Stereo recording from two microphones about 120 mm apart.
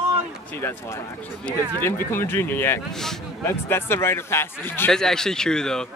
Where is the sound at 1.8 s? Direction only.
20° left (ahead or behind).